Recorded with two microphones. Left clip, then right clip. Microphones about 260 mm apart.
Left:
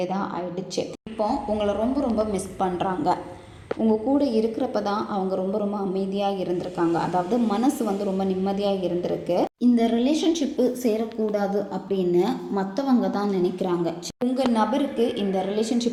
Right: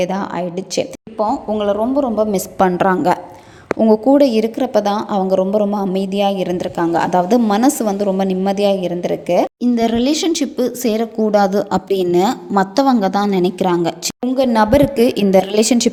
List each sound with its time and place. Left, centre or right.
0.0 s a woman's voice: right